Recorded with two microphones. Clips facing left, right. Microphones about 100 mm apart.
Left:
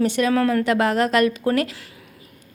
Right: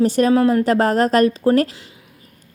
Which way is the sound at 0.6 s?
40° right (ahead or behind).